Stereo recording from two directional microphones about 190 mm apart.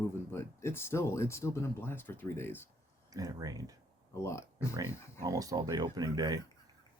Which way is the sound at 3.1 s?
20° right (ahead or behind).